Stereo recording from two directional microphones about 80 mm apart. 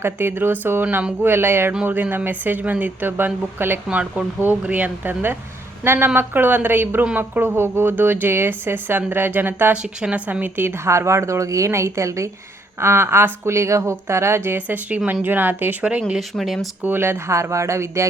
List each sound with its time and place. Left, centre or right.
0.0 s speech: right
3.8 s speech: centre
9.7 s a woman's voice: centre; by 14.8 s right
14.8 s speech: centre
15.8 s speech: centre
16.3 s speech: centre
16.8 s a woman's voice: right